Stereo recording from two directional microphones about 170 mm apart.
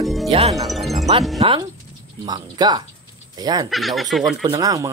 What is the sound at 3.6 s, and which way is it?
Speech, centre (ahead or behind).